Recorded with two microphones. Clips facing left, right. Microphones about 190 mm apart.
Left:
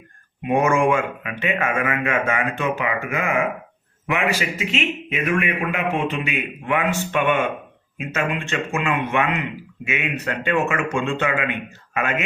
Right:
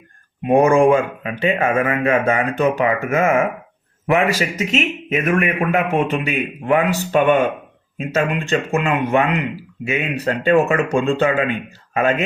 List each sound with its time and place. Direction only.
0.4 s a man's voice: 35° right (ahead or behind)